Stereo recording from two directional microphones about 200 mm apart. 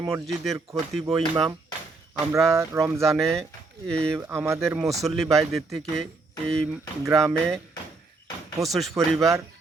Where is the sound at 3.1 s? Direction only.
5° left (ahead or behind).